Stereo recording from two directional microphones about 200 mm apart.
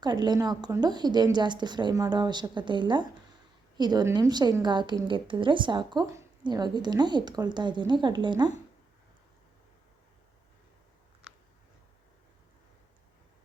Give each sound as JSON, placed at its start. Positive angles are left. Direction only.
{"t": 0.0, "sound": "a woman's voice", "side_deg": -20}